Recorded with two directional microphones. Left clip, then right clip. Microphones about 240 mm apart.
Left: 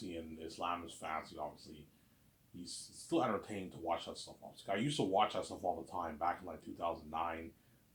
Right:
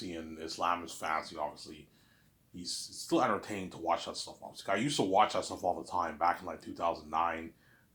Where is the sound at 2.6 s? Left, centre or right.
Right.